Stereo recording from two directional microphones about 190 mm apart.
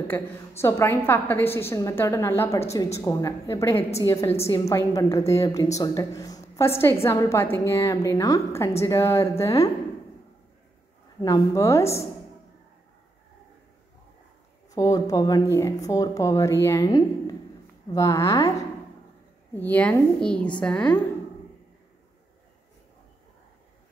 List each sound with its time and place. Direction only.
0.1 s a woman's voice: 10° left (ahead or behind)
11.2 s a woman's voice: 15° left (ahead or behind)
14.7 s a woman's voice: 20° left (ahead or behind)
19.5 s a woman's voice: 10° left (ahead or behind)